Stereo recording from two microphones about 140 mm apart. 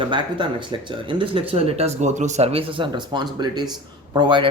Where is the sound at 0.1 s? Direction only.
35° right (ahead or behind).